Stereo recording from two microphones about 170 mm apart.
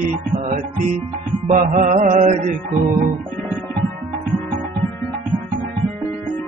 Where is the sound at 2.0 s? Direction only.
55° right (ahead or behind).